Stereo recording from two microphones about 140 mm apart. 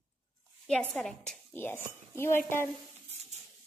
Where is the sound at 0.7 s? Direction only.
5° left (ahead or behind).